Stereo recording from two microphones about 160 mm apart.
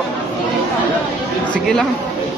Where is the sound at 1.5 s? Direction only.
5° left (ahead or behind).